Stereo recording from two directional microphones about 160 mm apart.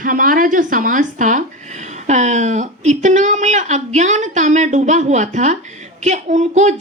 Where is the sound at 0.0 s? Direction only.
60° right (ahead or behind).